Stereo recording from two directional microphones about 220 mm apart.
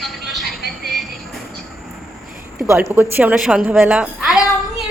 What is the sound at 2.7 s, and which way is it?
A woman's voice, 10° right (ahead or behind).